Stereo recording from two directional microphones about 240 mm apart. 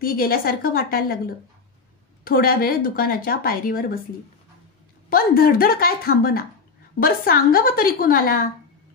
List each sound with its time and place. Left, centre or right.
0.0 s a woman's voice: left
5.1 s a woman's voice: left